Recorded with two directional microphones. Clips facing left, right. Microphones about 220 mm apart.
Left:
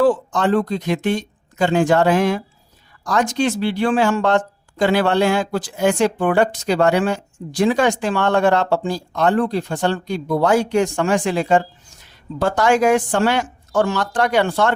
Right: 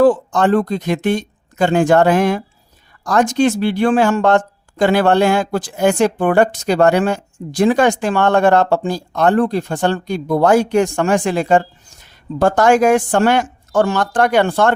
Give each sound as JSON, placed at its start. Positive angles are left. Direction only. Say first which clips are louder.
{"t": 0.0, "sound": "speech", "louder": "right 4 dB", "side_deg": -50}